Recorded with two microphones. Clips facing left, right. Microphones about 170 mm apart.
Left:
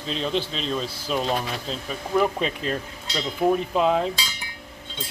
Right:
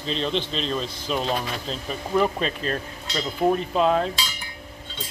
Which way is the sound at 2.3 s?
15° left (ahead or behind).